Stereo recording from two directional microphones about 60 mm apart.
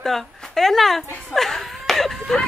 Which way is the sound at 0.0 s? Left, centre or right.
Centre.